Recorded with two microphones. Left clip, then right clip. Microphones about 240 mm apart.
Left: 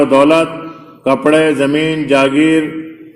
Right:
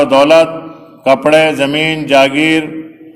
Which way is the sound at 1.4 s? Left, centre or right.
Centre.